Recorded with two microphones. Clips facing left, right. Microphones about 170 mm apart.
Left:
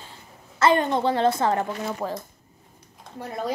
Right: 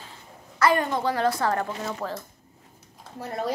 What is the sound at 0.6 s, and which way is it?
Speech, 25° left (ahead or behind).